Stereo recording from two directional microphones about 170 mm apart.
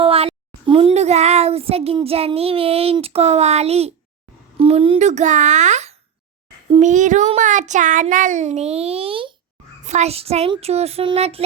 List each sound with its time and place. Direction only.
0.0 s a child's voice: 35° right (ahead or behind)
9.8 s child singing: 40° right (ahead or behind)